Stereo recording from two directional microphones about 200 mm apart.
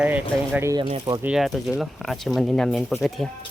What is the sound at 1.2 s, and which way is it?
Speech, centre (ahead or behind).